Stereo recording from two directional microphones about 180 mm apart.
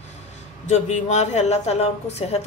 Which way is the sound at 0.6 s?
40° left (ahead or behind).